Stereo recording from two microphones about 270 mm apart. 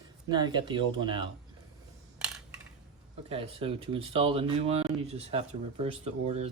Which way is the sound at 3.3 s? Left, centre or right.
Right.